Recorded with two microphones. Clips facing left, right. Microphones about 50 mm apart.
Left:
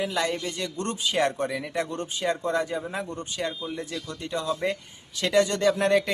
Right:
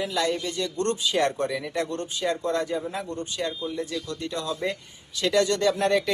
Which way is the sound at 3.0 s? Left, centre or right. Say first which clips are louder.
Right 1 dB; left.